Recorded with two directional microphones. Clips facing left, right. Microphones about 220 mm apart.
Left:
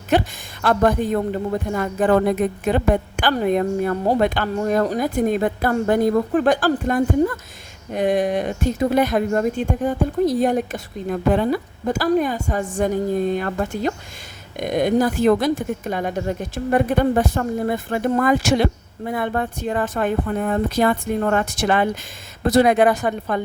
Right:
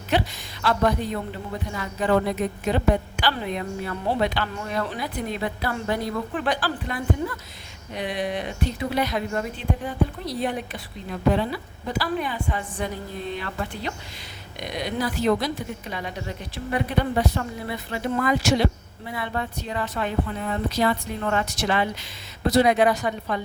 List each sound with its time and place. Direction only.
0.1 s a woman's voice: 50° left (ahead or behind)